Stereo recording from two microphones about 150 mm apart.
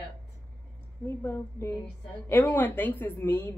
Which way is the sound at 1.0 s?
15° left (ahead or behind).